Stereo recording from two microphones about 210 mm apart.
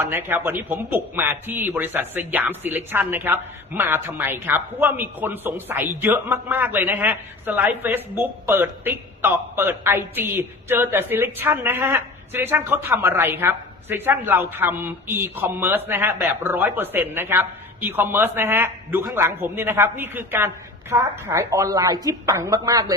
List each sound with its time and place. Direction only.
0.0 s a man's voice: 10° right (ahead or behind)